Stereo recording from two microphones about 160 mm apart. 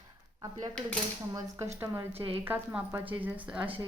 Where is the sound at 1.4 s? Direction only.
15° right (ahead or behind).